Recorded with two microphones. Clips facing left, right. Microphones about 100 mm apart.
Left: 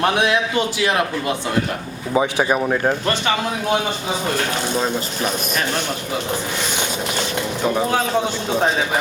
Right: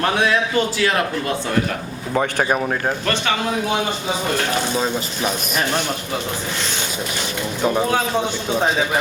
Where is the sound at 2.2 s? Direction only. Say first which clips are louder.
Left 1 dB; 5° left (ahead or behind).